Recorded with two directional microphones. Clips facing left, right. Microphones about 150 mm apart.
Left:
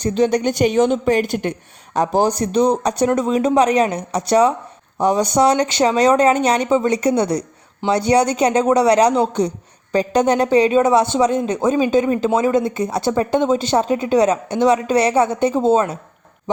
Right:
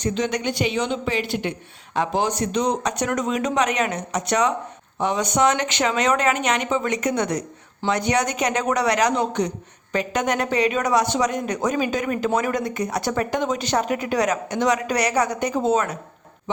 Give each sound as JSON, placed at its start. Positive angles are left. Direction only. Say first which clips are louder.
{"t": 0.0, "sound": "a woman's voice", "louder": "left 7 dB", "side_deg": 35}